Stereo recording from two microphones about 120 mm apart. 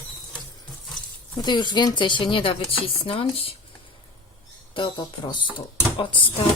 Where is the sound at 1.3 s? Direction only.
35° left (ahead or behind).